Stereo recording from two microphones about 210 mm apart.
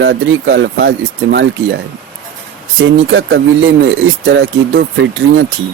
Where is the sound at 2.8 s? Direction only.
70° right (ahead or behind).